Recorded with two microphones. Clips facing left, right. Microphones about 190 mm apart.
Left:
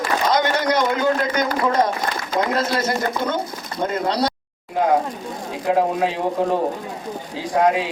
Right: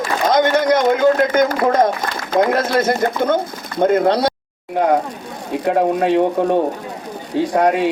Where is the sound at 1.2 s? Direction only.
50° right (ahead or behind).